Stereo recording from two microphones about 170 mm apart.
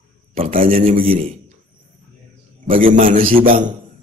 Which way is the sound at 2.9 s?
50° right (ahead or behind).